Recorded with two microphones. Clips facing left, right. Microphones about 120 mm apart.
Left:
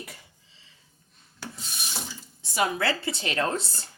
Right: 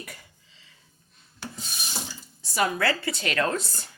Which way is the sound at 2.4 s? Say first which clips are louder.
Right 1 dB; 20° left (ahead or behind).